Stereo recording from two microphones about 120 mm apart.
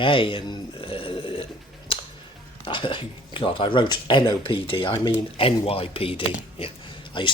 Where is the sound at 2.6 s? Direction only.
45° left (ahead or behind).